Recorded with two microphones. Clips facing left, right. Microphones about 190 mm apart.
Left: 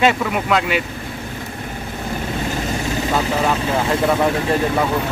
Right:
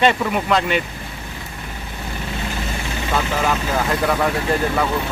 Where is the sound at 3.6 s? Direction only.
30° left (ahead or behind).